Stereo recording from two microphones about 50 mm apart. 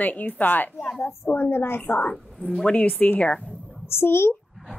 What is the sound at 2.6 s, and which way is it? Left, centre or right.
Speech, left.